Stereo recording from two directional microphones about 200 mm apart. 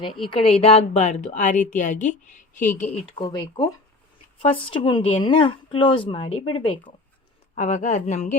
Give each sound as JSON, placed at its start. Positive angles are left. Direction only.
{"t": 0.0, "sound": "speech", "side_deg": 25}
{"t": 3.1, "sound": "speech", "side_deg": 25}
{"t": 7.5, "sound": "speech", "side_deg": 40}